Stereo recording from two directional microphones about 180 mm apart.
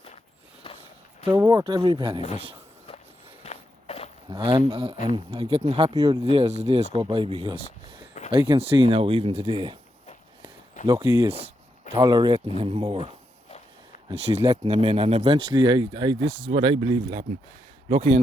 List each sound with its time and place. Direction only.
1.2 s speech: 20° right (ahead or behind)
3.4 s walk: 35° left (ahead or behind)
4.3 s speech: 25° right (ahead or behind)
11.0 s speech: 20° right (ahead or behind)
11.3 s speech: 35° right (ahead or behind)
14.1 s speech: 35° right (ahead or behind)